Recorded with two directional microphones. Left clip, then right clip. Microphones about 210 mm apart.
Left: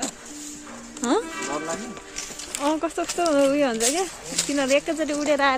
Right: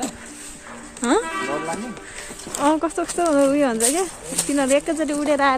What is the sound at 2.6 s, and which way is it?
Speech, centre (ahead or behind).